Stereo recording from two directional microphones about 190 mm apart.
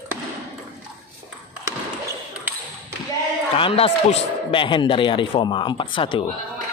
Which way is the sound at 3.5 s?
30° left (ahead or behind).